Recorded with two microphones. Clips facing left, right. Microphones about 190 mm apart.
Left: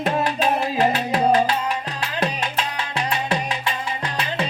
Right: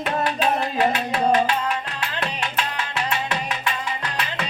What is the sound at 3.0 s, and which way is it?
Music, 30° left (ahead or behind).